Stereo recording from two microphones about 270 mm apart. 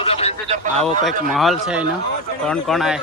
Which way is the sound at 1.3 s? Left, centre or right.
Centre.